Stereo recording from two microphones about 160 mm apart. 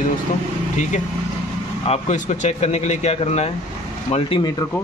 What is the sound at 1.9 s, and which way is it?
Speech, 50° left (ahead or behind).